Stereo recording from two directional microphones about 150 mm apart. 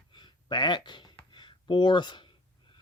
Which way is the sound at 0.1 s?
30° left (ahead or behind).